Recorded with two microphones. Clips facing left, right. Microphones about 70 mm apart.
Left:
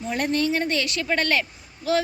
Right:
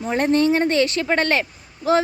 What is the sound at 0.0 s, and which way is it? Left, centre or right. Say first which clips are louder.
A woman's voice: right 6 dB; right.